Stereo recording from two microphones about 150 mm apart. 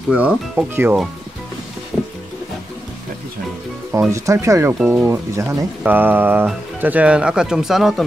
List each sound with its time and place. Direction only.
0.1 s speech: 10° right (ahead or behind)
4.1 s speech: 20° right (ahead or behind); by 8.0 s centre (ahead or behind)